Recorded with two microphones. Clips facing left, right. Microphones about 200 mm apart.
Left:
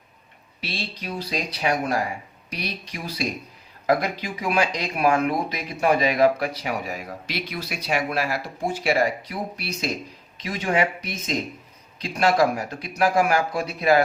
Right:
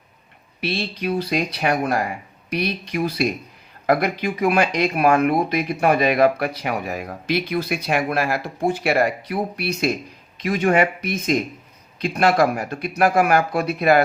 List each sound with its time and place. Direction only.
0.6 s speech: 60° right (ahead or behind)